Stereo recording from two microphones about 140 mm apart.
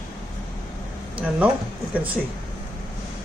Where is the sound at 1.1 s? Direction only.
10° right (ahead or behind).